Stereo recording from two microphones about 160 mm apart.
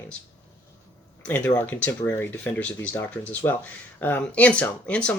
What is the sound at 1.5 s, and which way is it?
Speech, 10° left (ahead or behind).